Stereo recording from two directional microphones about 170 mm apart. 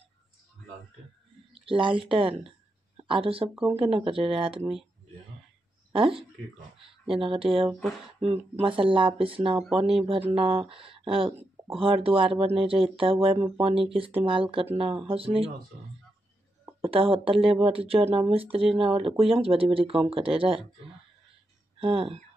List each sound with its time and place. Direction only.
1.5 s a woman's voice: 30° right (ahead or behind)
6.8 s speech: 30° right (ahead or behind)
16.8 s speech: 35° right (ahead or behind)
21.7 s speech: 30° right (ahead or behind)